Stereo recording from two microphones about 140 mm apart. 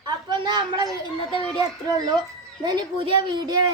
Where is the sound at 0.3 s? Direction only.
30° right (ahead or behind).